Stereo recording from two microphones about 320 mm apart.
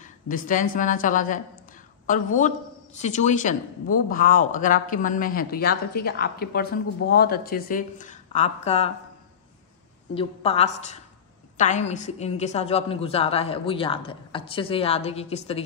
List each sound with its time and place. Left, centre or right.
0.0 s speech: left
10.1 s speech: centre